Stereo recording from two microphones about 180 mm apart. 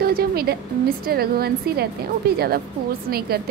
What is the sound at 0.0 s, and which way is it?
A woman's voice, 55° right (ahead or behind).